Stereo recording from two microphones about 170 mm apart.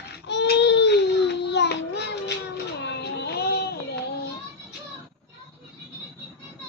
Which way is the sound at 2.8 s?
80° left.